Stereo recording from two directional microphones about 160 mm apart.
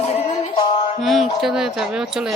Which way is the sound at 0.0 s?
45° left (ahead or behind).